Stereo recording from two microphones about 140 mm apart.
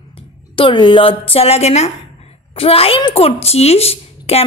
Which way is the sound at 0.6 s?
35° left (ahead or behind).